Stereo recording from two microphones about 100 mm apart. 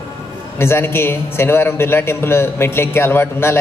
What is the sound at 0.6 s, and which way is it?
A man's voice, 25° left (ahead or behind).